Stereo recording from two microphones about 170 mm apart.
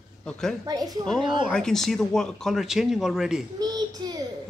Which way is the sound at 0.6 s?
20° right (ahead or behind).